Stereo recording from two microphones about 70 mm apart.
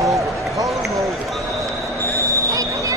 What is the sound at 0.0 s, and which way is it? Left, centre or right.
Run, right.